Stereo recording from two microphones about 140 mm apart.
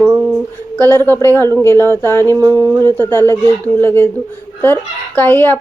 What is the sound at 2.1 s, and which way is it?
Speech, 15° left (ahead or behind).